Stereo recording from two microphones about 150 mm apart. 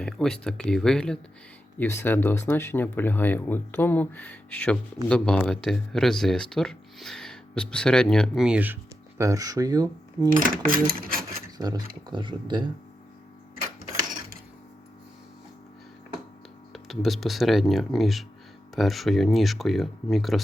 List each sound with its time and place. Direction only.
0.0 s speech: 5° left (ahead or behind)
1.8 s speech: 15° left (ahead or behind); by 10.2 s 25° right (ahead or behind)
10.2 s speech: 70° right (ahead or behind)
11.5 s speech: 25° right (ahead or behind)
16.7 s speech: centre (ahead or behind)